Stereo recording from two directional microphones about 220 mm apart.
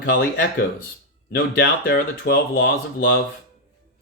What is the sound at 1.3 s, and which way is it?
Speech, 45° left (ahead or behind).